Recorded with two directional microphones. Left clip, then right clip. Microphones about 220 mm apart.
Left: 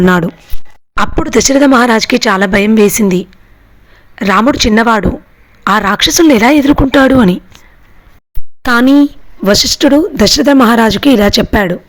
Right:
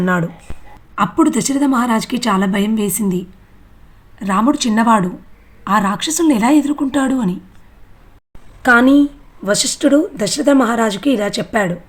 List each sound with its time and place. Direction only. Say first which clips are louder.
0.0 s a woman's voice: left 8 dB; 40° left (ahead or behind)
1.5 s a woman's voice: left 11 dB; 45° left (ahead or behind)
8.6 s a woman's voice: left 3 dB; 40° left (ahead or behind)